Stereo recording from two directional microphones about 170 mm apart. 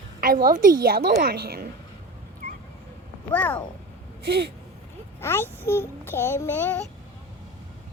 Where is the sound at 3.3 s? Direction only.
10° left (ahead or behind).